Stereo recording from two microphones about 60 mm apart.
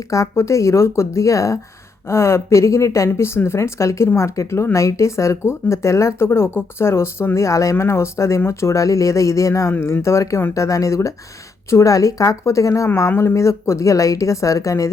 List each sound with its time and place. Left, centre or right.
0.1 s speech: left
3.1 s speech: left
7.3 s speech: left
10.5 s speech: left
13.1 s speech: left